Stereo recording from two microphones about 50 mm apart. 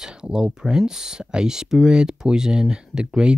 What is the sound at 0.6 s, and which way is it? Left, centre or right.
Speech, centre.